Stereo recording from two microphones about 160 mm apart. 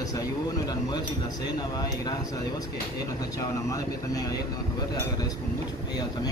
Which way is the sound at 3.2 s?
20° left (ahead or behind).